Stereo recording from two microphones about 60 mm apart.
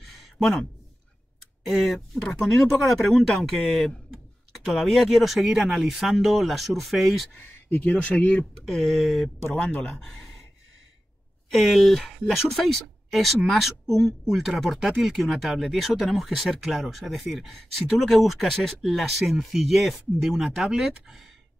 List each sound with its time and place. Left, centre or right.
0.0 s a sound: centre
1.6 s speech: centre
8.0 s speech: left
8.6 s speech: centre
9.6 s speech: centre
10.0 s a sound: centre
11.5 s speech: centre